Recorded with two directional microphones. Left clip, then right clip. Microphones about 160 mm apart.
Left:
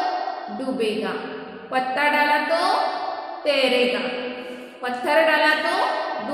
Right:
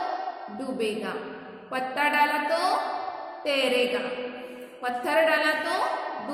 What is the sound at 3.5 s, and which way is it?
Speech, 20° right (ahead or behind).